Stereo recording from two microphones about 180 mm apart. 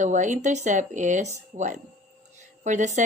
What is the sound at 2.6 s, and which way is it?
Speech, 40° right (ahead or behind).